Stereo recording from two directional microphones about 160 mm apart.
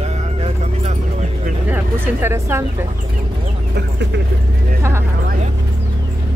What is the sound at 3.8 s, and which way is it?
Speech, 90° right.